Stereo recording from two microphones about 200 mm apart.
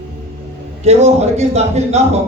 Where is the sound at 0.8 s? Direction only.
35° right (ahead or behind).